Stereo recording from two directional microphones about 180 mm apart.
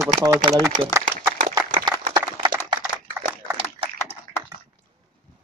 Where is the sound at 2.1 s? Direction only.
25° right (ahead or behind).